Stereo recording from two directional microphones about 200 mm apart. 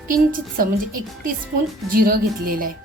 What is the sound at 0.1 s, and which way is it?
A woman's voice, 45° right (ahead or behind).